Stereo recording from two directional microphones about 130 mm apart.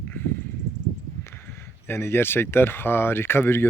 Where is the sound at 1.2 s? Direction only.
20° left (ahead or behind).